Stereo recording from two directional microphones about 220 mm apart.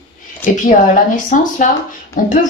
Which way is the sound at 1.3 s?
35° left (ahead or behind).